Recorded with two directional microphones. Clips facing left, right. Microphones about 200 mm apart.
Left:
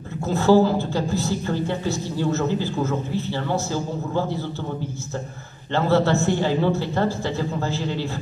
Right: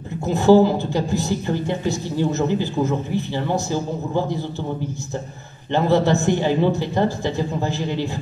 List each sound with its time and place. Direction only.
0.3 s a woman's voice: 15° right (ahead or behind)
5.7 s a woman's voice: 15° right (ahead or behind)